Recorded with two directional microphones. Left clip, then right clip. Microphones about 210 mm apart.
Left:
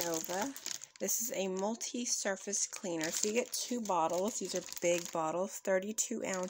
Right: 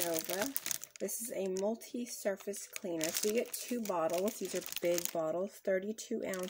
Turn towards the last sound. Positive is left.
turn(degrees=10)  # may be behind; listen again after turning